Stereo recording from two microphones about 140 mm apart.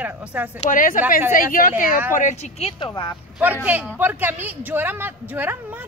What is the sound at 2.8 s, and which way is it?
Speech, 30° left (ahead or behind).